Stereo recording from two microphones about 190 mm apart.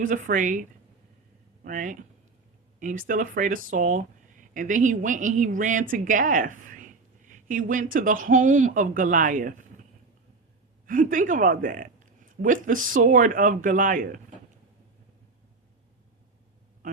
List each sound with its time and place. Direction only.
0.0 s speech: 45° right (ahead or behind)
1.6 s speech: 45° right (ahead or behind)
10.8 s speech: 45° right (ahead or behind)